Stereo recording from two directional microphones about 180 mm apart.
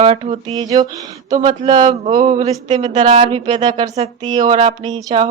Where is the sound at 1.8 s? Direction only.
40° right (ahead or behind).